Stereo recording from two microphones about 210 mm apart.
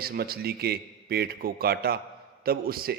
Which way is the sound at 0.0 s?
45° right (ahead or behind).